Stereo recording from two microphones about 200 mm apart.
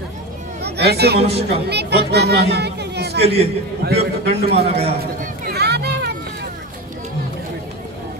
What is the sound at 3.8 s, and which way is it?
Speech, 55° right (ahead or behind).